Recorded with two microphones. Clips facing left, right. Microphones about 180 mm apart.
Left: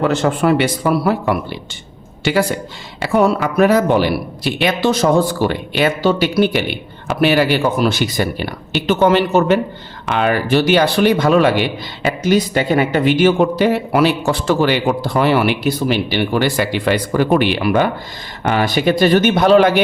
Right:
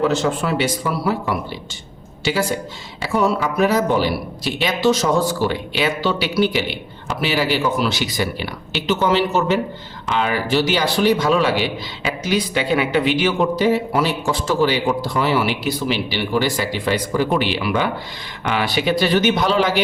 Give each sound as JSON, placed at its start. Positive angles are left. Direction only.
{"t": 0.0, "sound": "a man's voice", "side_deg": 55}